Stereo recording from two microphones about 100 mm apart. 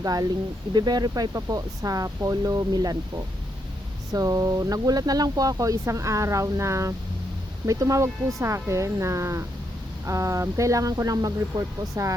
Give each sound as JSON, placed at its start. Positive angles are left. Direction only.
{"t": 0.0, "sound": "speech", "side_deg": -40}